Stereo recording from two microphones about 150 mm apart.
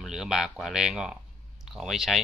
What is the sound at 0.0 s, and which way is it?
Speech, 5° right (ahead or behind).